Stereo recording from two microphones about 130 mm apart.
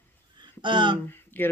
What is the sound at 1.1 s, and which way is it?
Speech, 15° left (ahead or behind).